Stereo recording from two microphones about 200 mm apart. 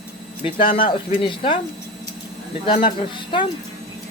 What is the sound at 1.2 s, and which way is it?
Speech, 25° left (ahead or behind).